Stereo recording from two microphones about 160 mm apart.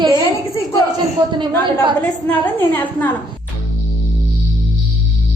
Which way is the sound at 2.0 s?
10° left (ahead or behind).